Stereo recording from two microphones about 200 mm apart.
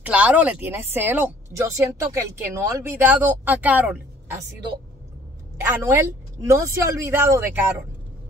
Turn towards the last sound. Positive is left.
turn(degrees=-15)  # may be behind; listen again after turning